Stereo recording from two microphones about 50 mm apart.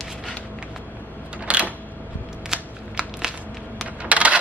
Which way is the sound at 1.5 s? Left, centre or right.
Right.